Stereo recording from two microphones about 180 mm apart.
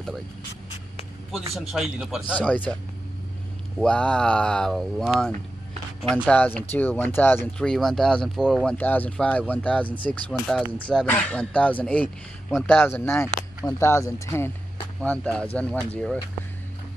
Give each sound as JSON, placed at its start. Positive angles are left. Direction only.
{"t": 1.5, "sound": "speech", "side_deg": 0}
{"t": 2.4, "sound": "speech", "side_deg": 5}
{"t": 3.8, "sound": "speech", "side_deg": 5}